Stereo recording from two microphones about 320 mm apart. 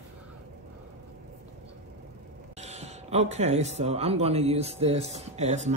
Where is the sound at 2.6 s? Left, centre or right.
Centre.